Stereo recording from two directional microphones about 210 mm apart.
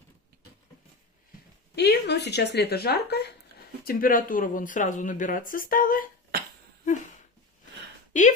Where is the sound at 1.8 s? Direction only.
55° left (ahead or behind).